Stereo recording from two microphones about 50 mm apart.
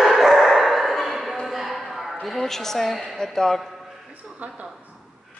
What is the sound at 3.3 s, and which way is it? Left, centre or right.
Speech, centre.